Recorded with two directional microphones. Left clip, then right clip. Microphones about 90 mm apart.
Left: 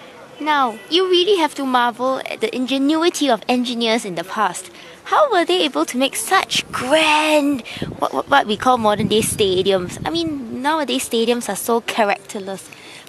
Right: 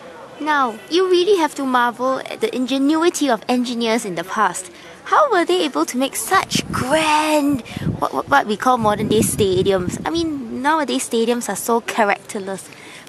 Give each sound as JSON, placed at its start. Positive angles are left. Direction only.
{"t": 0.4, "sound": "speech", "side_deg": 25}